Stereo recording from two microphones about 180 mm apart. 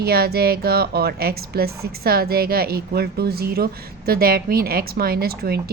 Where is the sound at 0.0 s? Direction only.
60° right (ahead or behind).